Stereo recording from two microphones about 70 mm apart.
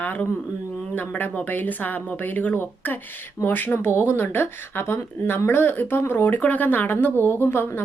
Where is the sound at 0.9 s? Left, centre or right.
Left.